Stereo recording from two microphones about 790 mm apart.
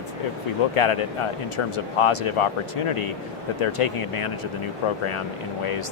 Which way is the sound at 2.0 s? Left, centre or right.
Left.